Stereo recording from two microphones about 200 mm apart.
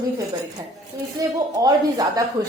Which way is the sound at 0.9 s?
15° right (ahead or behind).